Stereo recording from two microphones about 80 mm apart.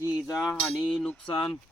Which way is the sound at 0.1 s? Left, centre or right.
Centre.